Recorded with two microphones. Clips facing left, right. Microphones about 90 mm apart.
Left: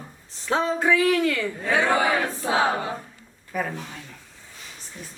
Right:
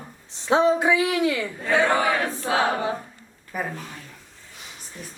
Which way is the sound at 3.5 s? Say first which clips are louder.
Left 2 dB; 5° right (ahead or behind).